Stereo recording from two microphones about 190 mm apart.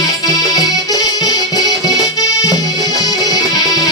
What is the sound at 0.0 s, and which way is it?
Accordion, 20° left (ahead or behind).